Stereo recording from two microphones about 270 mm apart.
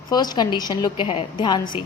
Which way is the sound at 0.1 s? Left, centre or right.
Centre.